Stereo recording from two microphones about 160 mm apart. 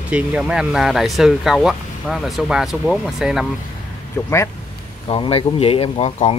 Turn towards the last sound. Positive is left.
turn(degrees=40)  # may be behind; listen again after turning